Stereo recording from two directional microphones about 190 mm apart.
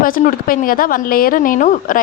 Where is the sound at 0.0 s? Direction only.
45° left (ahead or behind).